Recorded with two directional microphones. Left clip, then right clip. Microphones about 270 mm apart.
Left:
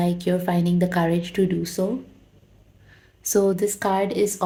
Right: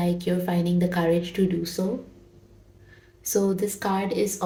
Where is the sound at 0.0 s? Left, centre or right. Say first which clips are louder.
Left 3 dB; left.